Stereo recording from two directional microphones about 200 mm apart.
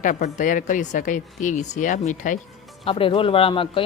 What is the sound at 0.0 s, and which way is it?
Speech, 40° left (ahead or behind).